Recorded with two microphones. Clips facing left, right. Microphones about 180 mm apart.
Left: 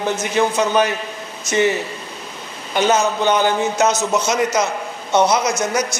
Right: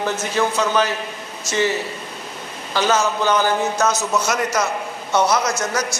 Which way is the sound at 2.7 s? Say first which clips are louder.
Left 2 dB; 20° left (ahead or behind).